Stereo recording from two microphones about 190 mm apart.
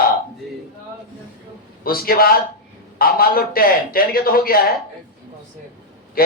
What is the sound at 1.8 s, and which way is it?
A man's voice, 50° left (ahead or behind).